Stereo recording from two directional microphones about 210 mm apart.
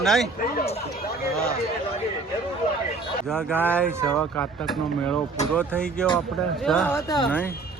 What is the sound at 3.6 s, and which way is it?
Speech, 5° left (ahead or behind).